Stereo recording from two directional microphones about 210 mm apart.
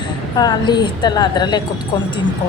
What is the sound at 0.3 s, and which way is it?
A woman's voice, 20° left (ahead or behind).